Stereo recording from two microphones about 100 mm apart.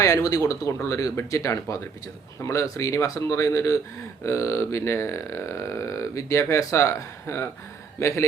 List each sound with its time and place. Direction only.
0.0 s speech: 35° left (ahead or behind)